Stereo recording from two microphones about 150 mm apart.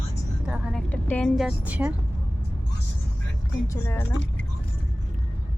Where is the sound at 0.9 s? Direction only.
10° left (ahead or behind); by 1.9 s 10° right (ahead or behind).